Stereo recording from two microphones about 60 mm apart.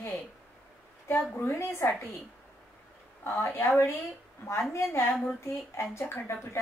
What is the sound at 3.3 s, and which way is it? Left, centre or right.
Speech, left.